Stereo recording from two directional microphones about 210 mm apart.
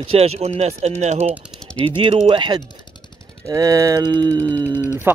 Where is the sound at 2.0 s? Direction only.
25° right (ahead or behind).